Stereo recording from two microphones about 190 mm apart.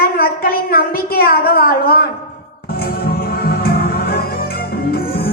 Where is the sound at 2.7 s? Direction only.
55° left (ahead or behind).